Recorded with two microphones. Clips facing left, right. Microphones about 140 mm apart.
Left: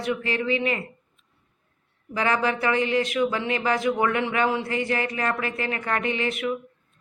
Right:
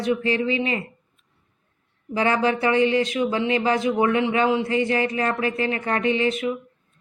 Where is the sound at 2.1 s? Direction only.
25° right (ahead or behind).